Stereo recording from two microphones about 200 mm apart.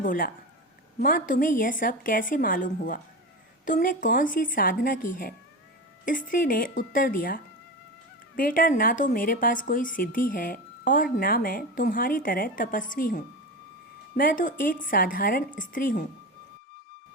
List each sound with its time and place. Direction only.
0.0 s a woman's voice: 45° left (ahead or behind)